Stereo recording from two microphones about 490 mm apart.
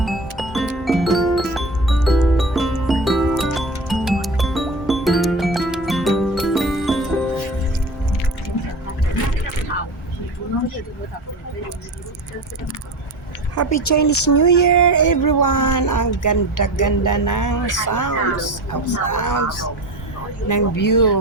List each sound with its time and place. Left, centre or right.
0.0 s music: centre
13.6 s speech: left